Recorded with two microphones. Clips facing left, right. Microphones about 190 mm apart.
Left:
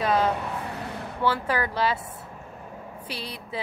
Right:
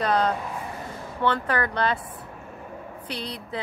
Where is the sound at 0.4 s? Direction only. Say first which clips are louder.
Left 1 dB; 70° left (ahead or behind).